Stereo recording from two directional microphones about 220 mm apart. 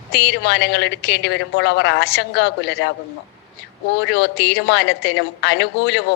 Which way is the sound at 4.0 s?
50° left (ahead or behind).